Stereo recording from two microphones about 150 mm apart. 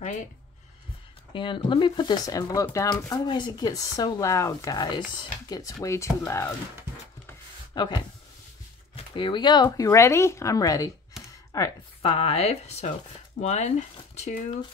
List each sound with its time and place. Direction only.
1.3 s speech: 35° left (ahead or behind)
7.7 s speech: 30° left (ahead or behind)
12.0 s speech: 40° left (ahead or behind)